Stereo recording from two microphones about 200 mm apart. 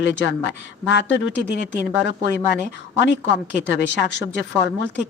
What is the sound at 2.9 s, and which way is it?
A woman's voice, 60° left (ahead or behind).